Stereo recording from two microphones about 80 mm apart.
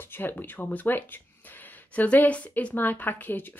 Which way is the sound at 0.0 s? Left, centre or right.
Left.